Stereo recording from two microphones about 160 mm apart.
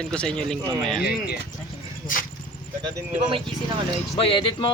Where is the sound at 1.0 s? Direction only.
75° left (ahead or behind).